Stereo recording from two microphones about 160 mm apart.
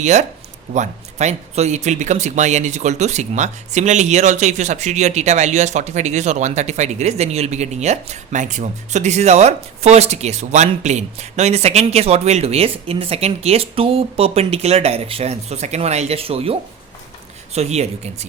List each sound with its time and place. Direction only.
0.0 s speech: 45° right (ahead or behind)